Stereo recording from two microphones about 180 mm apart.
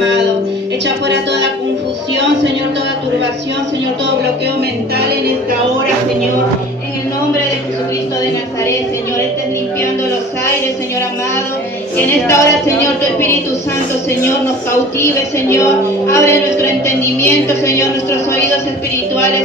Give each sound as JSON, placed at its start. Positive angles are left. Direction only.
{"t": 0.8, "sound": "a woman's voice", "side_deg": -75}
{"t": 4.9, "sound": "music", "side_deg": -60}
{"t": 12.0, "sound": "a woman's voice", "side_deg": 15}
{"t": 15.0, "sound": "a woman's voice", "side_deg": 15}
{"t": 19.1, "sound": "music", "side_deg": 15}